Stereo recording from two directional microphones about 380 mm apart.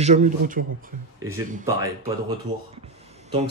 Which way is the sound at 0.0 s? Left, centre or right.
Centre.